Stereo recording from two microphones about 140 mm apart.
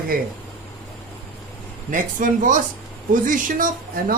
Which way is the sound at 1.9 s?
70° right (ahead or behind).